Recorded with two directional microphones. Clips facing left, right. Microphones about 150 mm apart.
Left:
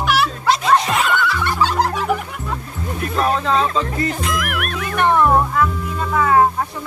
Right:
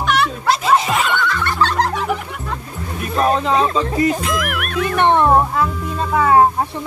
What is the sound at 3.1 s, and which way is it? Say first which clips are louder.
Speech: right 2 dB; 20° right (ahead or behind).